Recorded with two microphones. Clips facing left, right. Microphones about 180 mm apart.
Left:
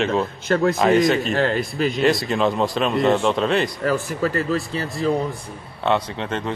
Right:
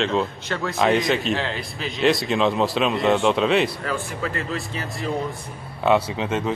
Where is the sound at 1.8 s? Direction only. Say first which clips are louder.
Even; centre (ahead or behind).